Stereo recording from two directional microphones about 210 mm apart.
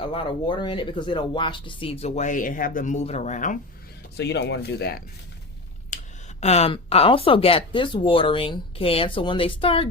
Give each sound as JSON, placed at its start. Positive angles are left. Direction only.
{"t": 0.0, "sound": "speech", "side_deg": 25}
{"t": 4.2, "sound": "speech", "side_deg": 55}
{"t": 5.9, "sound": "a sound", "side_deg": 35}
{"t": 6.4, "sound": "speech", "side_deg": 30}